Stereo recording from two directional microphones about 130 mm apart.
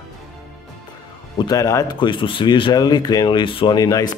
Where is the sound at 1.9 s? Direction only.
40° left (ahead or behind).